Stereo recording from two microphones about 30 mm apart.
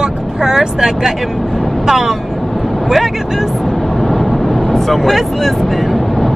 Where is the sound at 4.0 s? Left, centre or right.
Centre.